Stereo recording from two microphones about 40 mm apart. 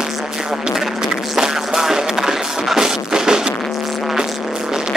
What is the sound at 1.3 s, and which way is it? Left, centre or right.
Music, centre.